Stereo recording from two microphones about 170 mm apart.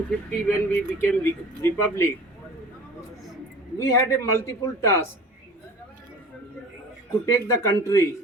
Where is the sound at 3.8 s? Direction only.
20° left (ahead or behind).